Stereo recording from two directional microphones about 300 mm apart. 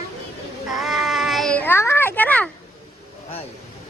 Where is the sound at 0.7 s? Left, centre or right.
Centre.